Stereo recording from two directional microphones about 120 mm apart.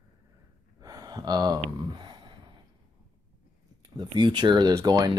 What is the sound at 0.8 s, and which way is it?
Speech, 30° right (ahead or behind).